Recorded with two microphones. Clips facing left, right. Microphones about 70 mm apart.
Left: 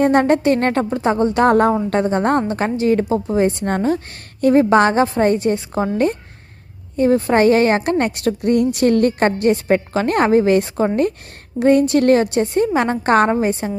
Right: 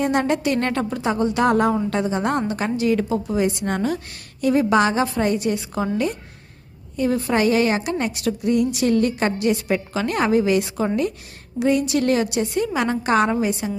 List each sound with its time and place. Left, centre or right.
0.0 s a woman's voice: left
6.9 s a woman's voice: left